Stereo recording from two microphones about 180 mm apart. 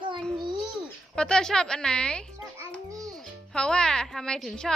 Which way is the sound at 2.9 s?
20° right (ahead or behind).